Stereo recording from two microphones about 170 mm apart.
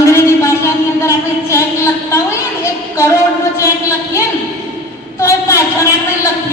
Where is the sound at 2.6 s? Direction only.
15° left (ahead or behind).